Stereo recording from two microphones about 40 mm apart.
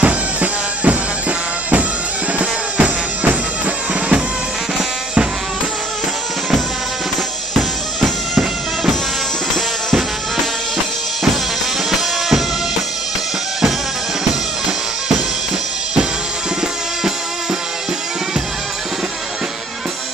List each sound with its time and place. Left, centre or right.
0.0 s music: right
2.3 s music: right
11.9 s music: centre